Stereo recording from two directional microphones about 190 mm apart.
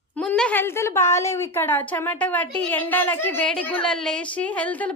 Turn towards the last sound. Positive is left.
turn(degrees=10)  # may be behind; listen again after turning